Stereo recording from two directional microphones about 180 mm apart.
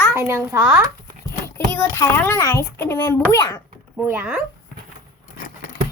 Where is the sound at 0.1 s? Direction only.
15° right (ahead or behind).